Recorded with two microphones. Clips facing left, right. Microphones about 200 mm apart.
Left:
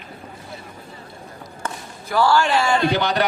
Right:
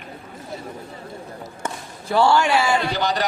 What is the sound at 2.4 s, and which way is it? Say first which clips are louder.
Speech: even; 10° right (ahead or behind).